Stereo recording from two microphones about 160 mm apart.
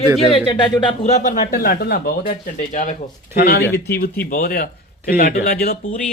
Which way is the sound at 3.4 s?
75° left (ahead or behind).